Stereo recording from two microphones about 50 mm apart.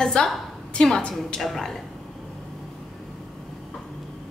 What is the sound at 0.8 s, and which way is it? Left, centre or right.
Speech, centre.